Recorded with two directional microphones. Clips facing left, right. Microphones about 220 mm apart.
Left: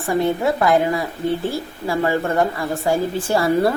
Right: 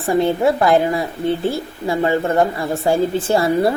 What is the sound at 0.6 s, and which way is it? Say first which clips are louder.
Speech: right 2 dB; 30° right (ahead or behind).